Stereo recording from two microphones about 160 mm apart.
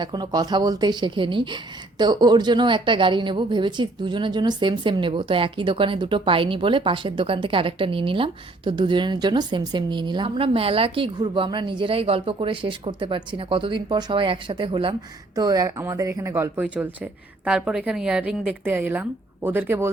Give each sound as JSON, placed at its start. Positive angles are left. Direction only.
{"t": 0.0, "sound": "a woman's voice", "side_deg": -25}
{"t": 15.4, "sound": "speech", "side_deg": -25}